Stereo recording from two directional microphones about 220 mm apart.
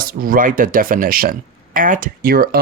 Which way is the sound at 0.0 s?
40° right (ahead or behind).